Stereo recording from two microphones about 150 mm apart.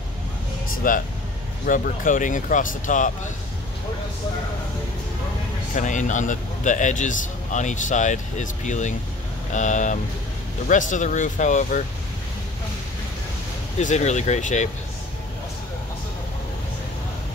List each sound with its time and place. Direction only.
0.8 s a man's voice: 65° left (ahead or behind)
5.8 s a man's voice: 55° left (ahead or behind)
13.7 s speech: 50° left (ahead or behind)